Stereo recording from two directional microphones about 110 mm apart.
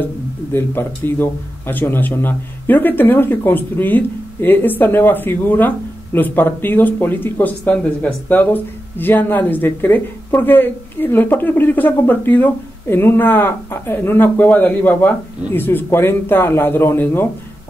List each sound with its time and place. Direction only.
0.5 s speech: 20° left (ahead or behind)